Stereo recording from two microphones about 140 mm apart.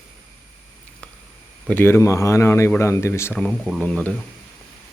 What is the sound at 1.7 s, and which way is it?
Speech, 15° left (ahead or behind).